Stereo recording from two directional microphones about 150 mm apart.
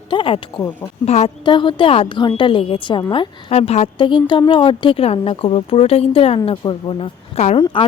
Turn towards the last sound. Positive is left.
turn(degrees=45)  # may be behind; listen again after turning